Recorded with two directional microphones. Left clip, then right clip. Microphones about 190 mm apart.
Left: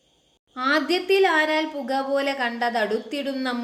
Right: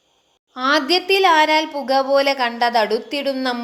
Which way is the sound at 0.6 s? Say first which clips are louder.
Right 5 dB; 15° right (ahead or behind).